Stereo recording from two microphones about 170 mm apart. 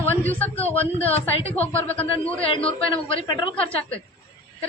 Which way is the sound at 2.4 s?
35° left (ahead or behind).